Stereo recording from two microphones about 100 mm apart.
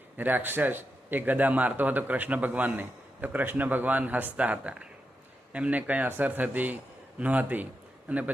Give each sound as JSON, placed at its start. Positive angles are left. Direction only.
{"t": 0.2, "sound": "a man's voice", "side_deg": -20}